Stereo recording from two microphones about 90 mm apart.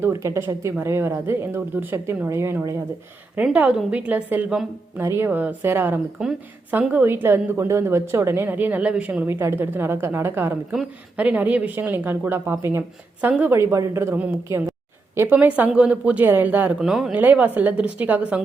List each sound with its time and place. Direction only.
0.0 s a woman's voice: 30° right (ahead or behind)
3.3 s a woman's voice: 15° right (ahead or behind)
6.2 s speech: 10° right (ahead or behind)
6.9 s a woman's voice: 25° right (ahead or behind)
10.7 s a woman's voice: 15° right (ahead or behind)
16.8 s speech: 5° right (ahead or behind)
17.2 s speech: 20° right (ahead or behind)